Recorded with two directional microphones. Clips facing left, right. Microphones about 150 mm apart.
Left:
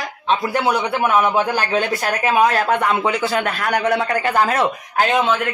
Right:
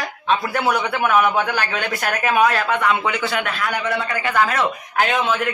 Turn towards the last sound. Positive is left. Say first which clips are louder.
# left 2 dB
turn(degrees=35)  # may be behind; listen again after turning